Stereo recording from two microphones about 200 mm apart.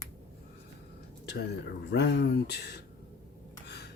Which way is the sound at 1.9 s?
60° left (ahead or behind).